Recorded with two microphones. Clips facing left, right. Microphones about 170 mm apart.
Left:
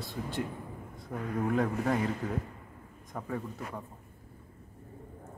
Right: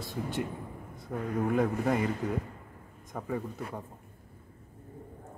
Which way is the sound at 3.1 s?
5° right (ahead or behind).